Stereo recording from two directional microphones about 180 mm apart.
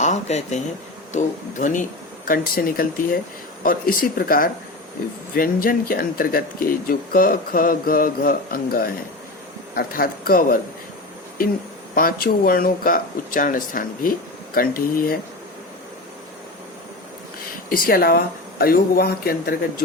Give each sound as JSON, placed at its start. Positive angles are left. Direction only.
{"t": 0.0, "sound": "speech", "side_deg": 40}
{"t": 11.9, "sound": "speech", "side_deg": 55}
{"t": 17.7, "sound": "speech", "side_deg": 55}